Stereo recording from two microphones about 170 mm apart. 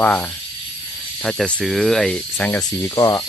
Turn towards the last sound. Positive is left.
turn(degrees=20)  # may be behind; listen again after turning